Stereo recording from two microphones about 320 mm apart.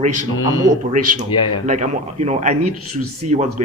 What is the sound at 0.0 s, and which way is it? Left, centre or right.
Speech, right.